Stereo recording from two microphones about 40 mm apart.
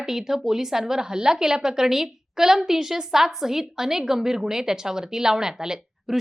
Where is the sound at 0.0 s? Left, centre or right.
Centre.